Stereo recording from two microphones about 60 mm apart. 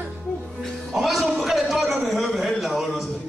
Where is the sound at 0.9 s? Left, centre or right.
Centre.